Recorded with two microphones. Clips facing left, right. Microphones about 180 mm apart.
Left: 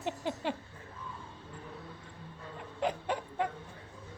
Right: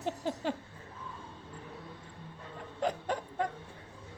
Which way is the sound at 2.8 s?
40° right (ahead or behind).